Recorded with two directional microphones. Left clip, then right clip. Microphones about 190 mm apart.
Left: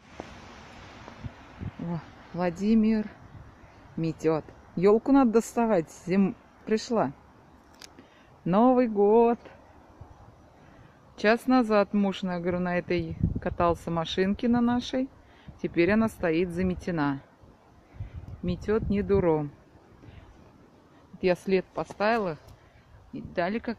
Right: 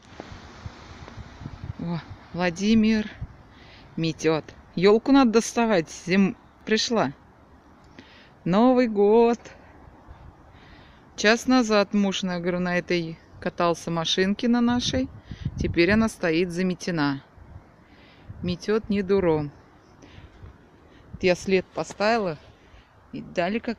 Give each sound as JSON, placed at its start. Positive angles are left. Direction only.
{"t": 1.9, "sound": "speech", "side_deg": 0}
{"t": 5.4, "sound": "speech", "side_deg": -15}
{"t": 5.7, "sound": "speech", "side_deg": 0}
{"t": 8.5, "sound": "speech", "side_deg": -5}
{"t": 11.1, "sound": "speech", "side_deg": -5}
{"t": 18.4, "sound": "speech", "side_deg": -5}
{"t": 21.2, "sound": "speech", "side_deg": -10}